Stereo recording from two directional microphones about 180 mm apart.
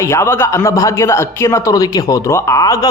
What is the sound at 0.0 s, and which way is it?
A man's voice, 15° left (ahead or behind).